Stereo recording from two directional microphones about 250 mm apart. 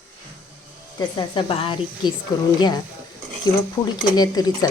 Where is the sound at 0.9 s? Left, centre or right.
Centre.